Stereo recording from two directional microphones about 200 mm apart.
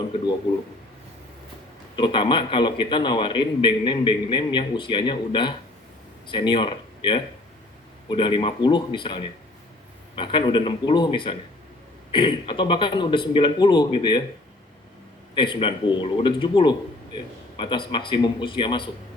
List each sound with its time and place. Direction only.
2.0 s a man's voice: 25° left (ahead or behind)
15.4 s a man's voice: 25° left (ahead or behind)